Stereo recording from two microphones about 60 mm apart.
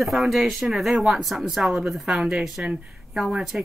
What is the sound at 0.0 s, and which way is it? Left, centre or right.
A woman's voice, centre.